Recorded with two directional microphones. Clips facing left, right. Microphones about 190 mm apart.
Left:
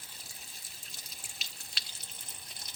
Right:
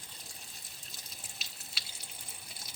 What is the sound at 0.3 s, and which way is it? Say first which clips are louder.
Water: right 1 dB; centre (ahead or behind).